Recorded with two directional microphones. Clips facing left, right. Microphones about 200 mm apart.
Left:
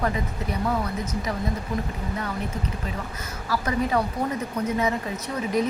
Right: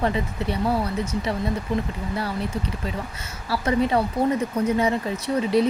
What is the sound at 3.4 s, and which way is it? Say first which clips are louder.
A woman's voice: right 4 dB; 30° right (ahead or behind).